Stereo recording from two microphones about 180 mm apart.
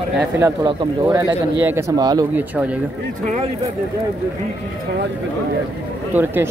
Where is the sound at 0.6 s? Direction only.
25° right (ahead or behind).